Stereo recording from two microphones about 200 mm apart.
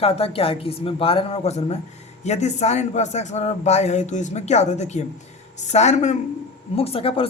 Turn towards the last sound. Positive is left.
turn(degrees=30)  # may be behind; listen again after turning